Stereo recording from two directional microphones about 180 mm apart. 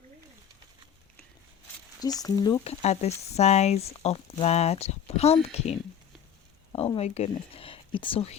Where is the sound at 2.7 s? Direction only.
35° left (ahead or behind).